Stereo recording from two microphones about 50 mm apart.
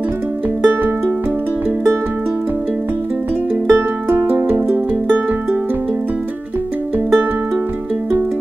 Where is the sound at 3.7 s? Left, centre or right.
Right.